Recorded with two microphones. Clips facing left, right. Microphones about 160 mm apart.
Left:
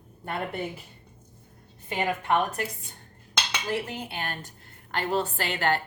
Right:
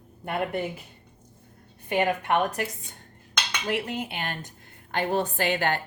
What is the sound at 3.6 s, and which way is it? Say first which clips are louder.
A woman's voice: right 4 dB; 20° right (ahead or behind).